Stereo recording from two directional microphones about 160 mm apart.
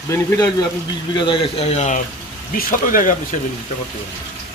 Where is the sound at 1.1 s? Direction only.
30° left (ahead or behind).